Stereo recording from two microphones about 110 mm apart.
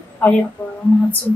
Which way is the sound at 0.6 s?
15° left (ahead or behind).